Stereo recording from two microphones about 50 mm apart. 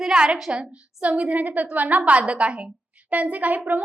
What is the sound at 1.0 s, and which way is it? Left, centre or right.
A woman's voice, right.